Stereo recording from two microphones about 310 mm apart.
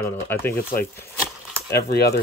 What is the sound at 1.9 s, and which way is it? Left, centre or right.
Speech, left.